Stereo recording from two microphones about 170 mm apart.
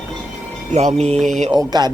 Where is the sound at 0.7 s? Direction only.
40° right (ahead or behind).